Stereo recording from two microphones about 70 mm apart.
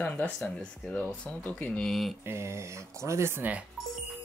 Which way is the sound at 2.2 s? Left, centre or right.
Right.